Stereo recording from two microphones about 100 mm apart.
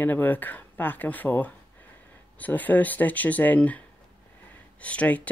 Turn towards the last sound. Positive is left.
turn(degrees=15)  # may be behind; listen again after turning